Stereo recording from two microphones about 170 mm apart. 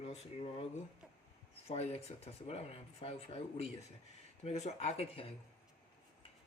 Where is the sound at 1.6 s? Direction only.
40° left (ahead or behind).